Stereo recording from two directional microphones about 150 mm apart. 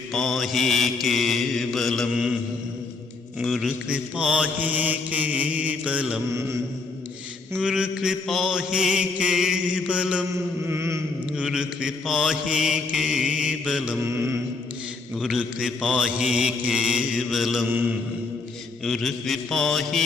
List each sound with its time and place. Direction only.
0.1 s mantra: centre (ahead or behind)
3.4 s mantra: centre (ahead or behind)
7.5 s mantra: 5° right (ahead or behind)
10.7 s chant: 20° right (ahead or behind)
11.3 s mantra: 5° right (ahead or behind)
14.0 s mantra: 20° right (ahead or behind)
15.1 s mantra: centre (ahead or behind)
18.9 s mantra: centre (ahead or behind)